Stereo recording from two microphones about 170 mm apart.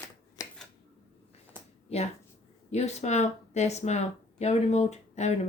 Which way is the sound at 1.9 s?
40° left (ahead or behind).